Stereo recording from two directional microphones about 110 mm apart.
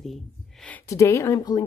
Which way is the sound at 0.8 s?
30° left (ahead or behind).